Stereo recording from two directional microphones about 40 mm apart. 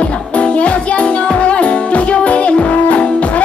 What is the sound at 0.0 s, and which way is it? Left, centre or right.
Music, left.